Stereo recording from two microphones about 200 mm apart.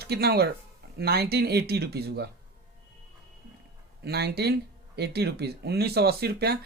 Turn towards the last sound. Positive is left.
turn(degrees=-50)  # may be behind; listen again after turning